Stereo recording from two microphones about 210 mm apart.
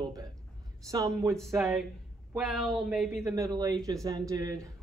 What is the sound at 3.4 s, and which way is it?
A man's voice, 15° right (ahead or behind).